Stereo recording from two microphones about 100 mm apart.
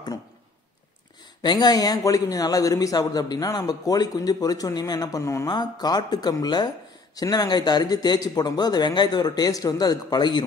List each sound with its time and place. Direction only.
1.4 s speech: 45° left (ahead or behind)
5.2 s speech: 30° left (ahead or behind)
5.5 s speech: 45° left (ahead or behind)